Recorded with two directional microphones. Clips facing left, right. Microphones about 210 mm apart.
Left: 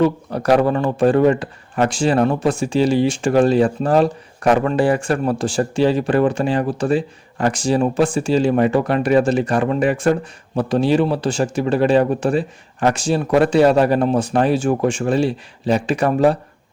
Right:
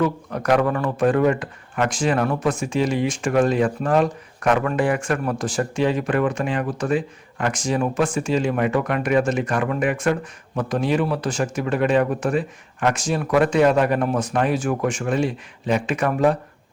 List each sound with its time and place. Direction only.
0.0 s a man's voice: 35° left (ahead or behind)